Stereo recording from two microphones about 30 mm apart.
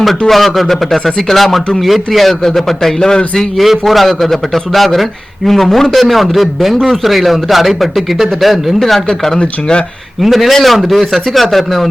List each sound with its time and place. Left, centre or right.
0.3 s speech: centre
3.0 s a man's voice: left
3.6 s speech: centre
9.0 s speech: centre
10.2 s speech: centre